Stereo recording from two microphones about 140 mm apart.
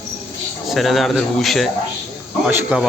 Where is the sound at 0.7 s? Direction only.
Centre (ahead or behind).